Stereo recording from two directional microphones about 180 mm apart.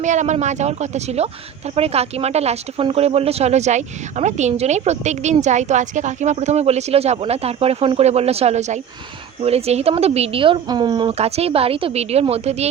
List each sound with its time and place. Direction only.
0.0 s speech: 40° right (ahead or behind)